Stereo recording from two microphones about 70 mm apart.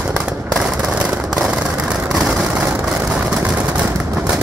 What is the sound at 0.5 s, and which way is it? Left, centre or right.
Fireworks, centre.